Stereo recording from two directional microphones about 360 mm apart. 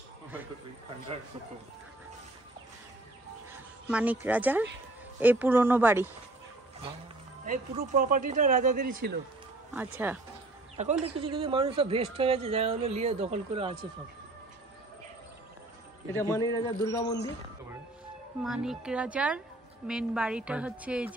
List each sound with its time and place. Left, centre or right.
3.8 s a woman's voice: centre
7.4 s speech: right
10.0 s a woman's voice: centre
10.8 s speech: centre
16.2 s speech: centre
18.4 s a woman's voice: centre